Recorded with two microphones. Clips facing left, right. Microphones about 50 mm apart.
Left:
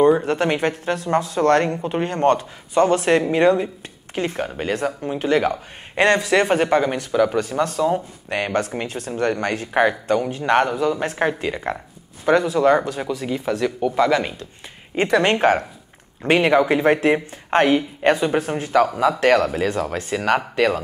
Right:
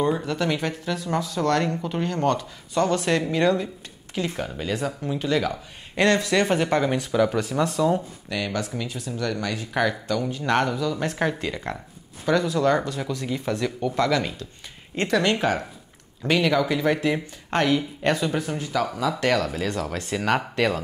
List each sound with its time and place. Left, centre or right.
0.2 s speech: left
2.7 s speech: left
6.7 s speech: centre
8.3 s speech: left
10.4 s speech: left
12.5 s speech: centre
14.1 s speech: left
15.2 s speech: left
18.4 s speech: left; by 20.1 s centre
20.1 s speech: centre